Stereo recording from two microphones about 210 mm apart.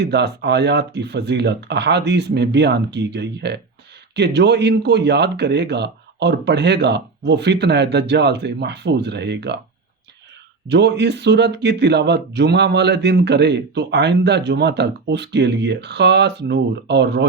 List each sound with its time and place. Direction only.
0.0 s a man's voice: 55° right (ahead or behind)
10.7 s speech: 55° right (ahead or behind)